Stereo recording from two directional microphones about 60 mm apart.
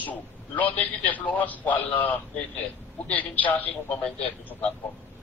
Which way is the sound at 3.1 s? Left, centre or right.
Left.